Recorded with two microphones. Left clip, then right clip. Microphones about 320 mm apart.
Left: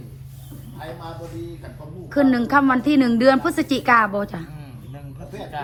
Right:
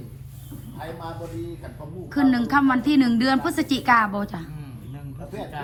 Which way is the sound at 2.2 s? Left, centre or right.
Centre.